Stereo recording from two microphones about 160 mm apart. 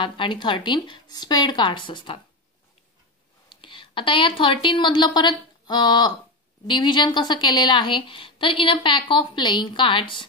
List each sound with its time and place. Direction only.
0.0 s a woman's voice: 30° left (ahead or behind)
3.4 s a woman's voice: 30° left (ahead or behind)